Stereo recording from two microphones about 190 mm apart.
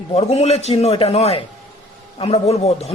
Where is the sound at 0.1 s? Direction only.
35° left (ahead or behind).